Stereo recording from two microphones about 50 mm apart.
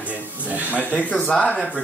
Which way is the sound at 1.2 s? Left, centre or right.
Centre.